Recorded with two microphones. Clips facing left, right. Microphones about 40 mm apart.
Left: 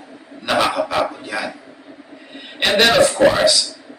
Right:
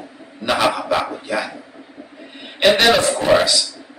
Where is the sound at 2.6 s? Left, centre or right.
Centre.